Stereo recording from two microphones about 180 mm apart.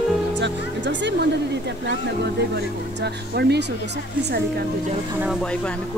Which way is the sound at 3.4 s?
65° right (ahead or behind).